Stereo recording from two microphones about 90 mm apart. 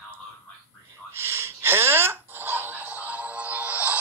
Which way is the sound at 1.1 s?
25° right (ahead or behind).